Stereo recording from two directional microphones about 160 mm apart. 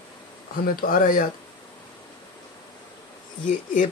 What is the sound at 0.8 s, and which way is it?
Speech, 60° left (ahead or behind).